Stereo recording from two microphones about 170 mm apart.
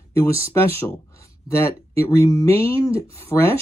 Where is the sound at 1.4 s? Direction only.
15° left (ahead or behind).